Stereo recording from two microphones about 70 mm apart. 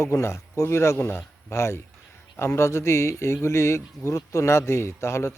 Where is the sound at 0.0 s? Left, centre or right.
Left.